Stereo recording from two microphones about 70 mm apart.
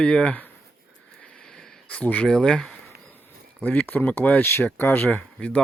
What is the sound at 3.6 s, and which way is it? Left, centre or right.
Speech, left.